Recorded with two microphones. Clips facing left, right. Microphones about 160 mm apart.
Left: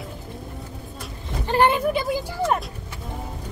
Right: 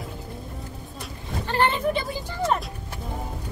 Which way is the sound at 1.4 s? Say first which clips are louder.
Left 4 dB; 15° left (ahead or behind).